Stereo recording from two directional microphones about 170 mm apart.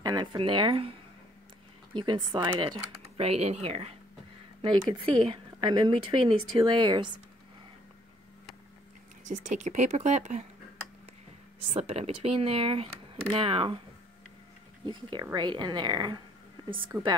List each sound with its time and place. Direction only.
0.0 s speech: 25° right (ahead or behind)
2.0 s speech: 25° right (ahead or behind)
4.6 s speech: 25° right (ahead or behind)
9.3 s speech: 45° right (ahead or behind)
11.7 s speech: 35° right (ahead or behind)
14.9 s speech: 30° right (ahead or behind)
16.9 s a woman's voice: centre (ahead or behind)